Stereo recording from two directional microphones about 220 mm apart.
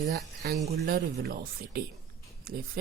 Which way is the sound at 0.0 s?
45° right (ahead or behind).